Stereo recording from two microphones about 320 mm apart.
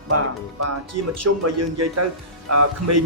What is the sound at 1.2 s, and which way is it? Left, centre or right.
Speech, right.